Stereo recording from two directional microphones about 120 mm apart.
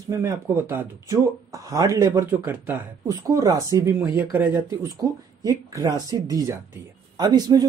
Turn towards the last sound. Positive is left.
turn(degrees=-30)  # may be behind; listen again after turning